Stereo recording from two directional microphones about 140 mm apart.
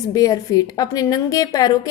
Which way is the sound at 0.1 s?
25° left (ahead or behind).